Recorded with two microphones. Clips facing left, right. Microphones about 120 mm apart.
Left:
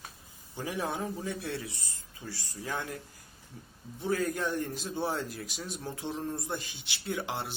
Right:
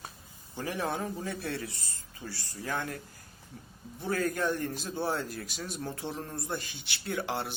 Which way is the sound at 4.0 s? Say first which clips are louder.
Even; 15° left (ahead or behind).